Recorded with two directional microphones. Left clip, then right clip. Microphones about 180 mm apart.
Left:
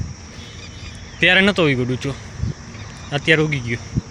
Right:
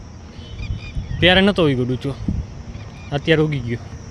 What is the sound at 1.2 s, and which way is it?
Speech, 15° right (ahead or behind).